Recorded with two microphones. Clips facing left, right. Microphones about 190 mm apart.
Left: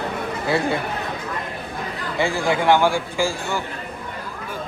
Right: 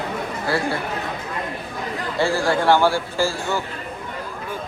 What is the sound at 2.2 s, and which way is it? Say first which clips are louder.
A man's voice: right 1 dB; 15° left (ahead or behind).